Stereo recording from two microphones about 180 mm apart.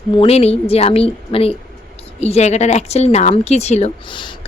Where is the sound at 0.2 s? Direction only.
35° left (ahead or behind).